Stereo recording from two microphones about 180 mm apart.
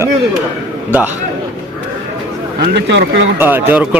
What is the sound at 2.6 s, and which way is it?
Speech, 65° right (ahead or behind).